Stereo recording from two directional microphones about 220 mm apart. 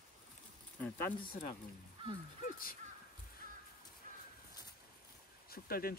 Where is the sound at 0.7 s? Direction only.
10° left (ahead or behind).